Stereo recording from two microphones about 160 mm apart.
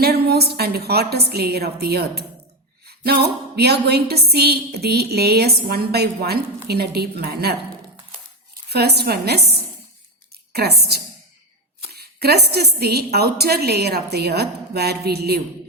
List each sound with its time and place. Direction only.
0.0 s a woman's voice: 85° right
8.7 s a woman's voice: 90° right